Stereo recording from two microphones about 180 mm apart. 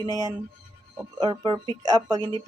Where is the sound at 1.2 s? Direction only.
25° right (ahead or behind).